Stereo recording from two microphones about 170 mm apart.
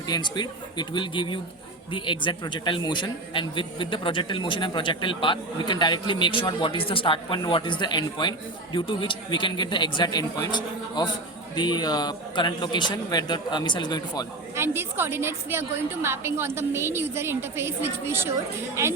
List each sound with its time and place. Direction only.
0.1 s a man's voice: 25° left (ahead or behind)
14.5 s a woman's voice: 15° right (ahead or behind)